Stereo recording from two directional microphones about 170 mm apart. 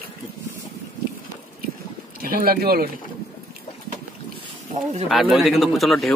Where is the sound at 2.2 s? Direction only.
60° right (ahead or behind).